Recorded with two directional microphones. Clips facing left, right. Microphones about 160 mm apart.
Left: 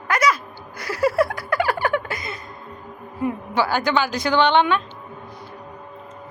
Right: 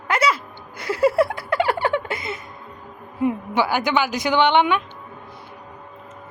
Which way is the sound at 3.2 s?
20° right (ahead or behind).